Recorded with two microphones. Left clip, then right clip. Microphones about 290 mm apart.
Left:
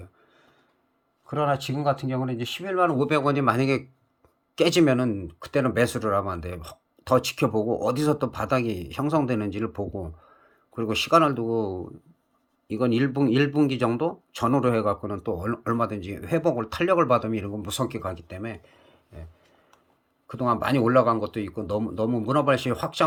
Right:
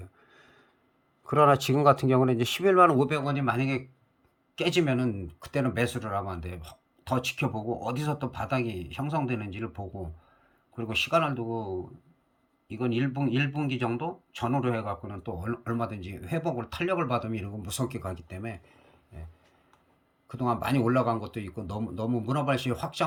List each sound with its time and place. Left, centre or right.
1.3 s speech: centre
3.1 s speech: centre
12.6 s speech: centre
20.2 s speech: centre